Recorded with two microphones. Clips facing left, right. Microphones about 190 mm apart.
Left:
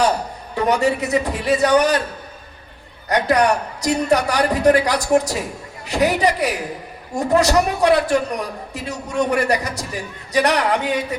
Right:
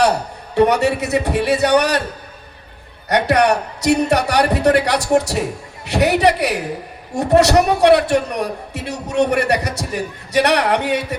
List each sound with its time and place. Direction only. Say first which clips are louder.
0.6 s a man's voice: right 3 dB; 70° right (ahead or behind)
3.1 s a man's voice: right 2 dB; 70° right (ahead or behind)